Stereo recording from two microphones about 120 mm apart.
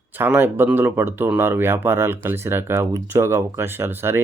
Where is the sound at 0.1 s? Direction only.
15° right (ahead or behind).